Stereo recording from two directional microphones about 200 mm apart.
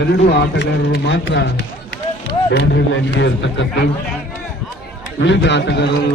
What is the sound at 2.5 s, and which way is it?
A man's voice, 60° left (ahead or behind).